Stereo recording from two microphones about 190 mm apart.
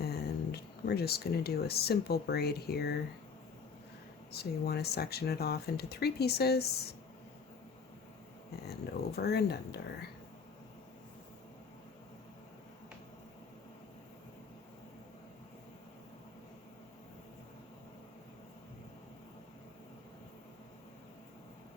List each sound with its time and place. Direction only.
0.0 s speech: 55° left (ahead or behind)
4.3 s speech: 55° left (ahead or behind)
8.6 s speech: 55° left (ahead or behind)